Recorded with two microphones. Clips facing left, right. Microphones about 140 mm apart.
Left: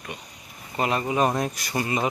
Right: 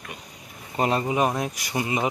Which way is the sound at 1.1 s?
5° right (ahead or behind).